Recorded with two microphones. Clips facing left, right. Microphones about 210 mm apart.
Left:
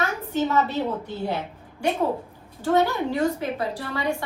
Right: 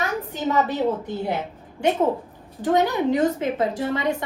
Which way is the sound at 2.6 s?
20° right (ahead or behind).